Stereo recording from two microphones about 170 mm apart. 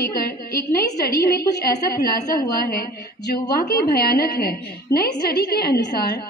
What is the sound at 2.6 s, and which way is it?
A woman's voice, 60° left (ahead or behind).